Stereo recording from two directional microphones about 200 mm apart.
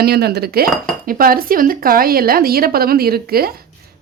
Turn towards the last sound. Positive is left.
turn(degrees=-50)  # may be behind; listen again after turning